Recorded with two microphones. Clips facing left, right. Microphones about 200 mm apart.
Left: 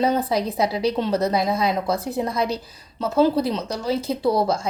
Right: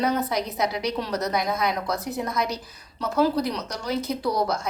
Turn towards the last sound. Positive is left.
turn(degrees=30)  # may be behind; listen again after turning